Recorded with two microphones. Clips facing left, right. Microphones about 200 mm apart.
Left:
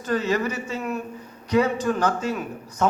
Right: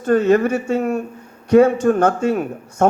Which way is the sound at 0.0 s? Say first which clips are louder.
Right 9 dB; 55° right (ahead or behind).